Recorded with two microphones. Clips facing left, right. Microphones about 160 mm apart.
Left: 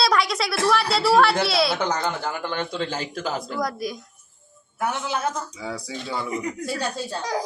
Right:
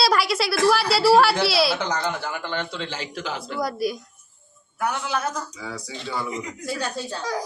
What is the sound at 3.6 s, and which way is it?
Speech, 5° right (ahead or behind).